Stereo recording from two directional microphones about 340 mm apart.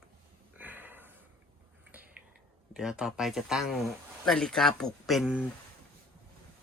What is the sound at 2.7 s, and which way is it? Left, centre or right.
Speech, centre.